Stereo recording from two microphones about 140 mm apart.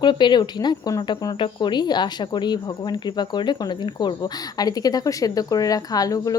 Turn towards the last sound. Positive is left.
turn(degrees=25)  # may be behind; listen again after turning